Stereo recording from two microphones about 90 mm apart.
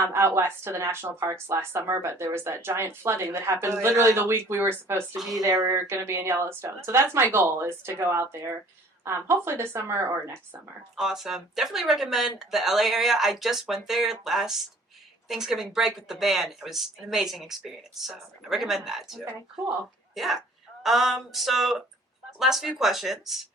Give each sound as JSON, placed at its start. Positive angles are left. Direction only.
{"t": 0.0, "sound": "speech", "side_deg": -30}
{"t": 5.1, "sound": "speech", "side_deg": 0}
{"t": 5.4, "sound": "speech", "side_deg": -40}
{"t": 5.9, "sound": "speech", "side_deg": -30}
{"t": 10.9, "sound": "speech", "side_deg": -5}